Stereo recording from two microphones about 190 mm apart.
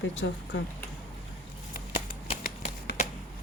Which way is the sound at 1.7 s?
50° left (ahead or behind).